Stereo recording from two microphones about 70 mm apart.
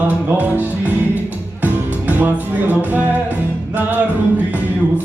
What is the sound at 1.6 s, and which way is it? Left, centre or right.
Music, right.